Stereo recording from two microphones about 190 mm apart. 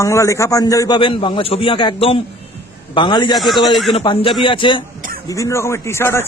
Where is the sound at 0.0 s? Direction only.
15° left (ahead or behind).